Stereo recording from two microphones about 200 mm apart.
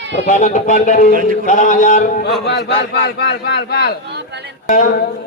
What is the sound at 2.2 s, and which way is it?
A man's voice, 55° left (ahead or behind).